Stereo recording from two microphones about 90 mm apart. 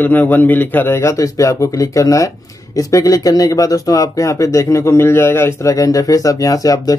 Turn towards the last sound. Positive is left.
turn(degrees=40)  # may be behind; listen again after turning